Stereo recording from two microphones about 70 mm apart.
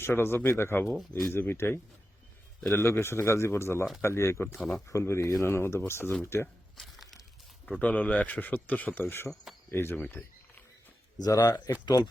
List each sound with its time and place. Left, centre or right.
0.0 s speech: left
4.5 s speech: centre
4.9 s speech: left
6.7 s a sound: centre
7.8 s speech: left
11.2 s speech: left